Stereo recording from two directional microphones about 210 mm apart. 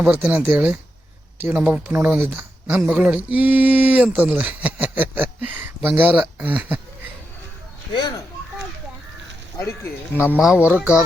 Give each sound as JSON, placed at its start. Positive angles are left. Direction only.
{"t": 0.0, "sound": "speech", "side_deg": -5}
{"t": 7.9, "sound": "speech", "side_deg": 20}
{"t": 10.3, "sound": "speech", "side_deg": -5}